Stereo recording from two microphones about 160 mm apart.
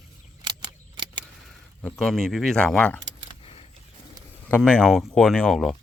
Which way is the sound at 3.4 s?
35° left (ahead or behind).